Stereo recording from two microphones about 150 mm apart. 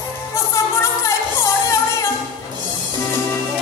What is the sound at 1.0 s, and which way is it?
Music, 20° left (ahead or behind).